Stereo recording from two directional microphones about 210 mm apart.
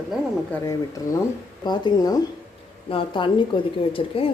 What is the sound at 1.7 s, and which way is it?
A woman's voice, 20° left (ahead or behind).